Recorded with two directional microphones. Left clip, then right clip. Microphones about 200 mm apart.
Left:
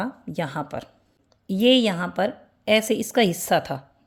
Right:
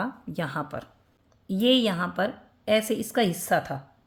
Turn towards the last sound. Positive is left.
turn(degrees=35)  # may be behind; listen again after turning